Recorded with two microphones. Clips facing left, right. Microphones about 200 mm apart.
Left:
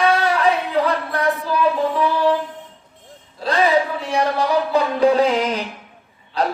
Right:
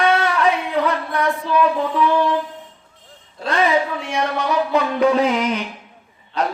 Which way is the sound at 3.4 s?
35° left (ahead or behind).